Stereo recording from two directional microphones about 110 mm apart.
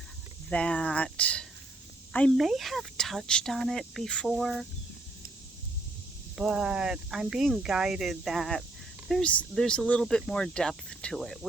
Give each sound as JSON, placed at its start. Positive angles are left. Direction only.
{"t": 0.5, "sound": "speech", "side_deg": 10}
{"t": 2.4, "sound": "speech", "side_deg": 0}
{"t": 6.3, "sound": "speech", "side_deg": -5}
{"t": 9.2, "sound": "speech", "side_deg": 10}